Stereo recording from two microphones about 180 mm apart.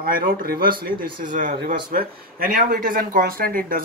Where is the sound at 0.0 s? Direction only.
55° right (ahead or behind).